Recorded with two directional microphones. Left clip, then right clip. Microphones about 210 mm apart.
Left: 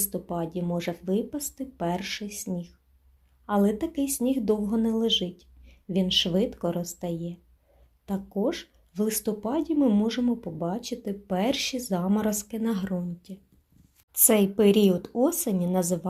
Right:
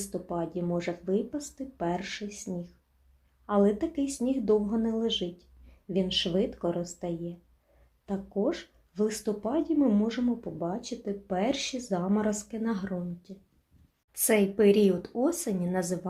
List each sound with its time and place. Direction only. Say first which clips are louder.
0.0 s speech: left 2 dB; 30° left (ahead or behind)